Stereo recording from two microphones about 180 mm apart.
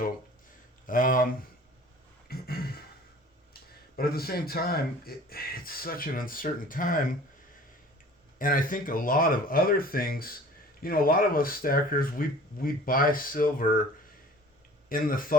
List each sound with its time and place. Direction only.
0.9 s speech: 50° left (ahead or behind)
2.2 s a sound: 60° left (ahead or behind)
3.9 s speech: 60° left (ahead or behind)
8.4 s speech: 50° left (ahead or behind)
14.8 s speech: 50° left (ahead or behind)